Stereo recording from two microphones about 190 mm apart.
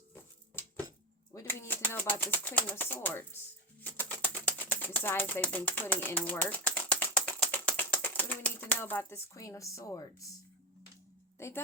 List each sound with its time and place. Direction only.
1.3 s speech: 15° left (ahead or behind)
3.9 s a sound: 10° left (ahead or behind)
11.3 s music: 15° left (ahead or behind)